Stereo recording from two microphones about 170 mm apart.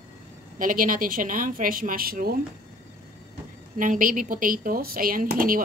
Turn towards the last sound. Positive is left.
turn(degrees=-55)  # may be behind; listen again after turning